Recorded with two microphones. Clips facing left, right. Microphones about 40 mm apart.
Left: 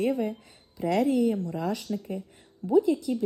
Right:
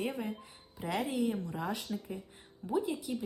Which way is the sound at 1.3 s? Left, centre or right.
Right.